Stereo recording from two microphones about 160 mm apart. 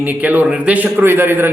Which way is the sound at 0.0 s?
10° right (ahead or behind).